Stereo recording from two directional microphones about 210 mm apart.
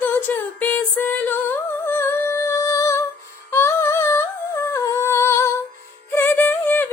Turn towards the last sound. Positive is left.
turn(degrees=10)  # may be behind; listen again after turning